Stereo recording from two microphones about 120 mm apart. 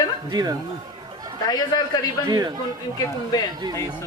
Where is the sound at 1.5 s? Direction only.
35° left (ahead or behind).